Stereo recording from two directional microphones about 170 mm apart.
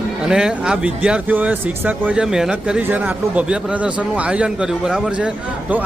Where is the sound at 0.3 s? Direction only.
5° right (ahead or behind).